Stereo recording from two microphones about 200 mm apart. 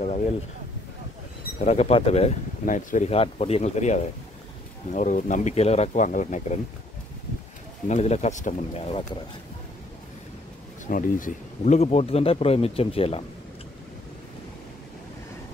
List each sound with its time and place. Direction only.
1.6 s speech: 35° left (ahead or behind)
7.9 s speech: 35° left (ahead or behind)
10.9 s speech: 45° left (ahead or behind)